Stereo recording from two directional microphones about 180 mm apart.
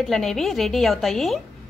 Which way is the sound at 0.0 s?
Centre (ahead or behind).